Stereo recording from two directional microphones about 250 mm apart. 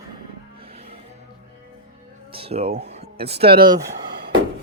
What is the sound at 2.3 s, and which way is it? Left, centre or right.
Speech, right.